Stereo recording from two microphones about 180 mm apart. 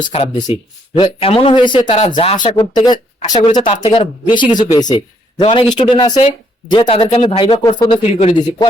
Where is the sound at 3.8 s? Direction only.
35° left (ahead or behind).